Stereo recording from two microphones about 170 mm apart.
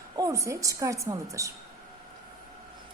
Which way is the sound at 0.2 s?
20° right (ahead or behind).